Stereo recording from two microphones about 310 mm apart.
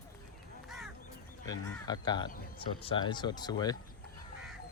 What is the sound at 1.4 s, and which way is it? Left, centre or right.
Speech, centre.